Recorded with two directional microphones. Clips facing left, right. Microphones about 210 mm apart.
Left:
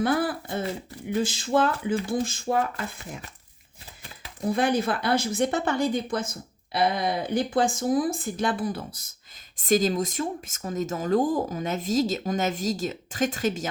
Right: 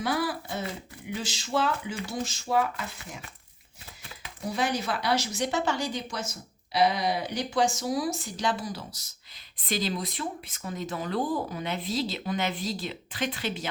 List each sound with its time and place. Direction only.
0.0 s speech: 50° left (ahead or behind)
4.4 s speech: 55° left (ahead or behind)